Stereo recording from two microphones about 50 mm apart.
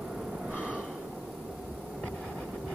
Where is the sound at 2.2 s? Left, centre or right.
Centre.